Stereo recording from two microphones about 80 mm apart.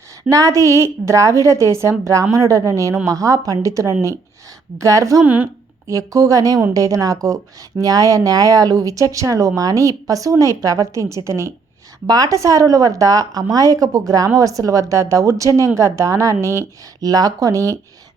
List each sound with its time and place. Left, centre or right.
0.3 s a woman's voice: right
5.2 s speech: centre
5.9 s speech: right
12.0 s a woman's voice: right
17.0 s speech: right